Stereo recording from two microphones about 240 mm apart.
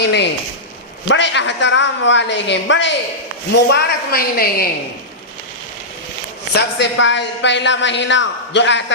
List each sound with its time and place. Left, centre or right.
0.0 s a man's voice: left
6.5 s a woman's voice: left